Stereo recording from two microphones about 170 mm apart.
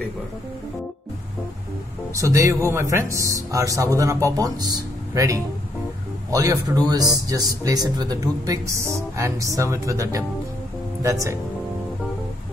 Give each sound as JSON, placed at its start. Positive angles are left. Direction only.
{"t": 2.1, "sound": "speech", "side_deg": -20}